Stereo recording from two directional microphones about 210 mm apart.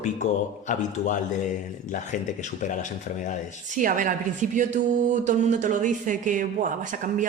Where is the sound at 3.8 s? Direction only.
40° right (ahead or behind).